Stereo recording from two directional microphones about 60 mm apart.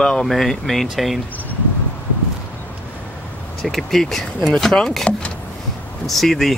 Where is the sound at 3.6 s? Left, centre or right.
Centre.